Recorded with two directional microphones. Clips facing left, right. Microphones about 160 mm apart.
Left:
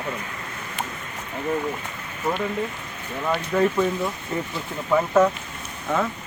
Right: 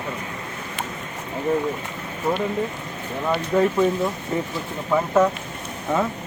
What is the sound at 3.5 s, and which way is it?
Speech, 20° right (ahead or behind).